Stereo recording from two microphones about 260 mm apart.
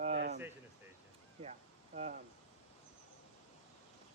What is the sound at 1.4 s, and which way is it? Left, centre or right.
Speech, right.